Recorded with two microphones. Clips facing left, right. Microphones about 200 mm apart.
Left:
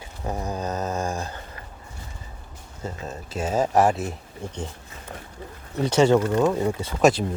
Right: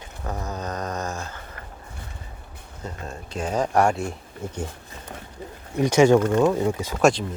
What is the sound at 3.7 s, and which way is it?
Speech, centre (ahead or behind).